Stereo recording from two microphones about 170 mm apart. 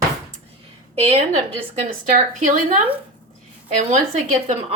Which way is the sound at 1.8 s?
45° right (ahead or behind).